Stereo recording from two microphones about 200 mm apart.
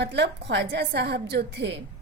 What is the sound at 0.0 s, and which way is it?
A woman's voice, 60° right (ahead or behind).